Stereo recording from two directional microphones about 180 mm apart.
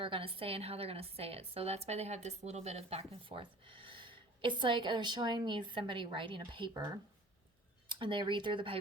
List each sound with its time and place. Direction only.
0.0 s a woman's voice: 30° right (ahead or behind)